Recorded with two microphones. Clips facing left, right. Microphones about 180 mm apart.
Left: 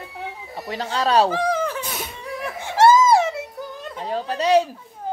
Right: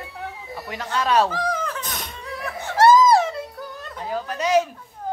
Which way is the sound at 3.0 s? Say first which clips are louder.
Even; 10° left (ahead or behind).